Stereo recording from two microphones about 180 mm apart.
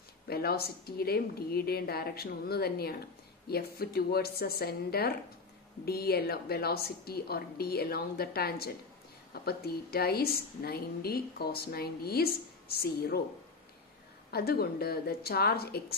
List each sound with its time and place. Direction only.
0.3 s a woman's voice: 60° left (ahead or behind)
14.3 s a woman's voice: 60° left (ahead or behind)